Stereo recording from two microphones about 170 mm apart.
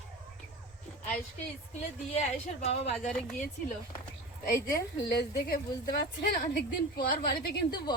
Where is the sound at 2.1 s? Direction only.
40° left (ahead or behind).